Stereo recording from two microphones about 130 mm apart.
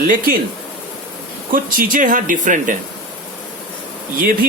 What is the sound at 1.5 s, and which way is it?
Speech, 90° right.